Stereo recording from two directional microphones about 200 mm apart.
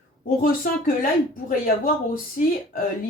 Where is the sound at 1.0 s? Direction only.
45° left (ahead or behind).